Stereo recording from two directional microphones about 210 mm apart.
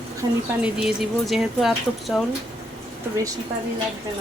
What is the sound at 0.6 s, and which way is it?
Speech, 5° right (ahead or behind).